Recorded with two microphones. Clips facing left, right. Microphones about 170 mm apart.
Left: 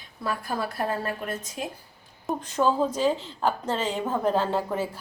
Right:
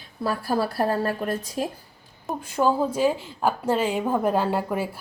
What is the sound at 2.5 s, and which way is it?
A woman's voice, 10° right (ahead or behind).